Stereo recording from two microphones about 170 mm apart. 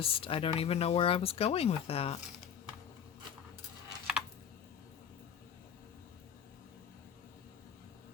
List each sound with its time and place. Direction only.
0.0 s speech: 35° left (ahead or behind)